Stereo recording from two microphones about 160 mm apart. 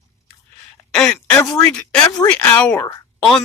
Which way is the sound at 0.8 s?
20° left (ahead or behind).